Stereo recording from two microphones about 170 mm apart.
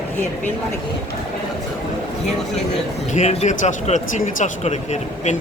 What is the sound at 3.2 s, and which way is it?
Speech, 40° left (ahead or behind).